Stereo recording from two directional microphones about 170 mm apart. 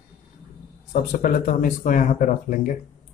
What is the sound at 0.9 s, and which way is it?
Speech, 50° left (ahead or behind).